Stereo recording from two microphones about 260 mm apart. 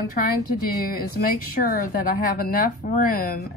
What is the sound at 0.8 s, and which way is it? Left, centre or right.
A woman's voice, left.